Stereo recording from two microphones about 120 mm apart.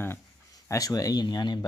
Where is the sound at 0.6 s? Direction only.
30° left (ahead or behind).